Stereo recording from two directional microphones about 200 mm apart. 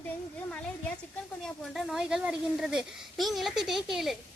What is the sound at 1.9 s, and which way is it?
Speech, 5° right (ahead or behind).